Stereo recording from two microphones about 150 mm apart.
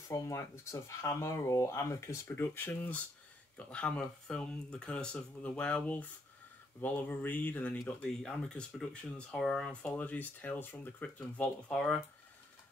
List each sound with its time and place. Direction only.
0.1 s speech: 20° left (ahead or behind)